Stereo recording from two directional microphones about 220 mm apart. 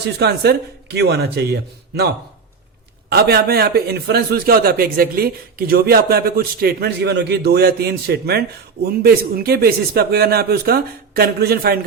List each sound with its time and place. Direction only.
0.2 s a man's voice: 45° right (ahead or behind)
3.1 s a man's voice: 45° right (ahead or behind)